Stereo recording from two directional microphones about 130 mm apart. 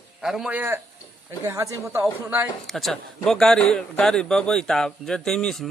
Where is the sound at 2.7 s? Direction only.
Centre (ahead or behind).